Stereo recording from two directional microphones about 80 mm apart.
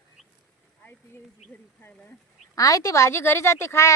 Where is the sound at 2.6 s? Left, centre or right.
Left.